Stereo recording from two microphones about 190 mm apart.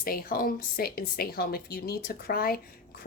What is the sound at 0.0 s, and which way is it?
A woman's voice, 50° left (ahead or behind).